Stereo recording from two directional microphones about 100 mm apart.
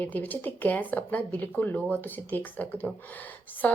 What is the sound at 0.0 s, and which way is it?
Speech, 15° left (ahead or behind).